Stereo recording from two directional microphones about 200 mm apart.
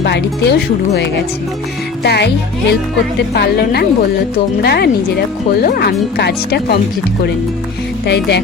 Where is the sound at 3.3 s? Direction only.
50° left (ahead or behind).